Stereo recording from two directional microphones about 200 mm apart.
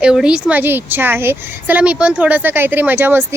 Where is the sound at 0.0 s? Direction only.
5° right (ahead or behind).